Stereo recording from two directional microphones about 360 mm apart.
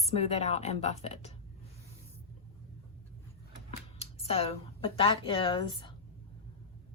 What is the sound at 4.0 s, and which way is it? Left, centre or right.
Speech, centre.